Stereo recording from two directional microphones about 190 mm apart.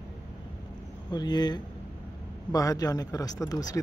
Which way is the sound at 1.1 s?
20° left (ahead or behind).